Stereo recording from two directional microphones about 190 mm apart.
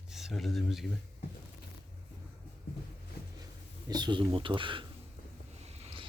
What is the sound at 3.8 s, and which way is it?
Speech, 20° right (ahead or behind).